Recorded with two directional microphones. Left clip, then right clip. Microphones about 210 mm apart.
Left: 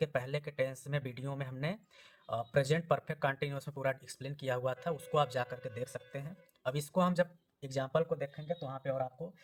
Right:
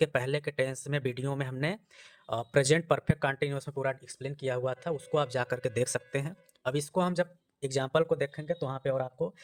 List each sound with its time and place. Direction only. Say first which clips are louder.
0.0 s speech: right 7 dB; 30° right (ahead or behind)
5.5 s speech: right 11 dB; 40° right (ahead or behind)
6.7 s speech: right 2 dB; 20° right (ahead or behind); by 9.1 s 50° right (ahead or behind)